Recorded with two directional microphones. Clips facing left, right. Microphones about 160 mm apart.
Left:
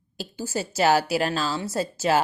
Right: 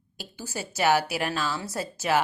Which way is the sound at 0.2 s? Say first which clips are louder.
Left 6 dB; 25° left (ahead or behind).